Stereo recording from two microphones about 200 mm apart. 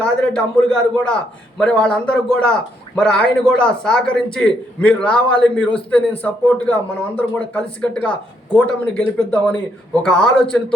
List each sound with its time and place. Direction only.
0.0 s a man's voice: 5° left (ahead or behind)